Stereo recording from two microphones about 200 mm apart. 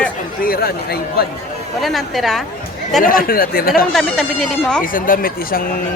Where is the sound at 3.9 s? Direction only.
Centre (ahead or behind).